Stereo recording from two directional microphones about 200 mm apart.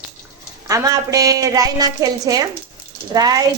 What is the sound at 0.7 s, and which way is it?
A woman's voice, 15° right (ahead or behind).